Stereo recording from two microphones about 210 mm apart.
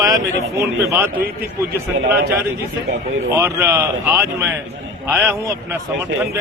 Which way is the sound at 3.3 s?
15° right (ahead or behind).